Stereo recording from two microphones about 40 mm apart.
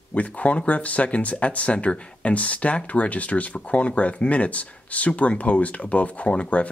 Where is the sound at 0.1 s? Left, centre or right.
Left.